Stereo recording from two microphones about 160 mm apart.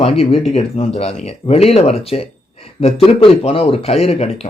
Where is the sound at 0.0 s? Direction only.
40° left (ahead or behind).